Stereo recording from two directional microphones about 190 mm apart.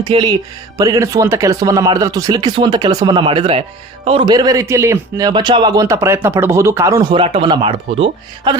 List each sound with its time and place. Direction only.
0.0 s speech: 25° right (ahead or behind)